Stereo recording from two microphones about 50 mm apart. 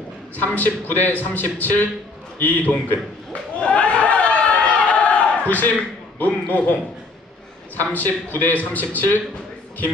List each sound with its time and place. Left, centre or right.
0.4 s a man's voice: left
3.6 s chatter: left
6.1 s a man's voice: left